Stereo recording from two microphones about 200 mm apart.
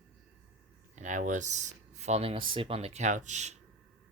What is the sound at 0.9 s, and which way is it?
Speech, 40° right (ahead or behind).